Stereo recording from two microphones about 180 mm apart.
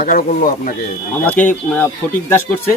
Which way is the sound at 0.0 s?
50° left (ahead or behind).